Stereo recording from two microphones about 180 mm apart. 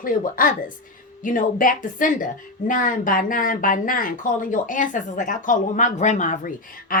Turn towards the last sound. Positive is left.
turn(degrees=45)  # may be behind; listen again after turning